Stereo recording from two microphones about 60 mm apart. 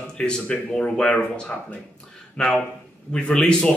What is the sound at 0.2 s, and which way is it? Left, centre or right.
Speech, centre.